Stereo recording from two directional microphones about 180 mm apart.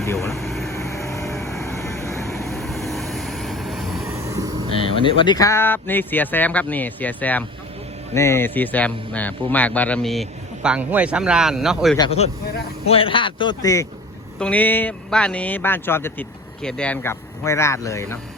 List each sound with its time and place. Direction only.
0.0 s speech: 15° left (ahead or behind)
0.3 s air conditioning: centre (ahead or behind)
0.7 s vehicle: 15° left (ahead or behind)
2.5 s vehicle: centre (ahead or behind)
4.0 s a sound: 15° right (ahead or behind)
4.7 s a man's voice: 30° left (ahead or behind); by 11.9 s centre (ahead or behind)
11.9 s a man's voice: 30° left (ahead or behind)
14.3 s speech: 5° left (ahead or behind)